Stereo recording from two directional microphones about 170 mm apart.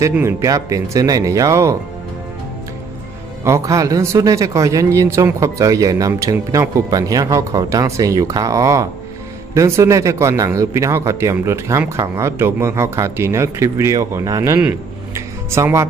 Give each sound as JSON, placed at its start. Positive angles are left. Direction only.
{"t": 0.0, "sound": "speech", "side_deg": -15}
{"t": 3.4, "sound": "speech", "side_deg": -15}